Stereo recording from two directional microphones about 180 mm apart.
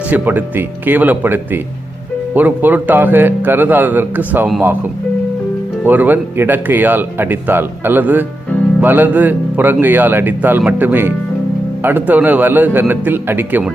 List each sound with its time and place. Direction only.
0.1 s a man's voice: 10° right (ahead or behind)
5.8 s a man's voice: 10° right (ahead or behind)